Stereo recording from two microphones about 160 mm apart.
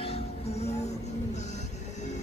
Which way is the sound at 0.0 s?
40° left (ahead or behind).